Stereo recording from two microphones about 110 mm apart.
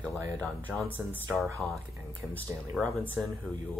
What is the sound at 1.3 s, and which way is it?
Speech, centre (ahead or behind).